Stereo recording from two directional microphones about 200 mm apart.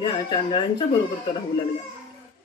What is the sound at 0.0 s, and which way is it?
Speech, 25° left (ahead or behind).